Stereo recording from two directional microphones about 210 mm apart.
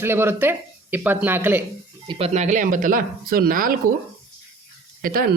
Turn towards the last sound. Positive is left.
turn(degrees=-40)  # may be behind; listen again after turning